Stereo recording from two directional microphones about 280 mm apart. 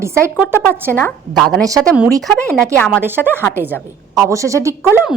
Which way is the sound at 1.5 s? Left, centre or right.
Centre.